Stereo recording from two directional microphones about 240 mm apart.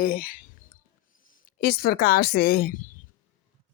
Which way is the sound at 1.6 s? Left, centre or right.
Left.